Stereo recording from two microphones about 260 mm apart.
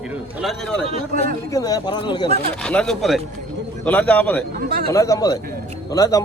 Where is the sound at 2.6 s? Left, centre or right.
Centre.